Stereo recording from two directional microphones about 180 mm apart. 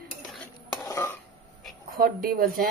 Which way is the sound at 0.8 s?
15° left (ahead or behind).